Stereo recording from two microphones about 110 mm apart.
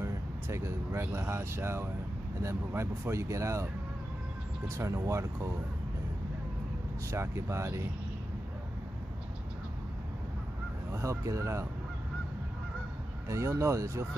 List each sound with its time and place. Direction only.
0.0 s speech: 25° right (ahead or behind)
7.1 s speech: 25° right (ahead or behind)
10.9 s speech: 25° right (ahead or behind)
13.3 s speech: 25° right (ahead or behind)